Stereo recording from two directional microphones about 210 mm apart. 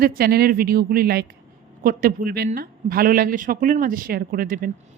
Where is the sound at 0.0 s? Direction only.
45° right (ahead or behind).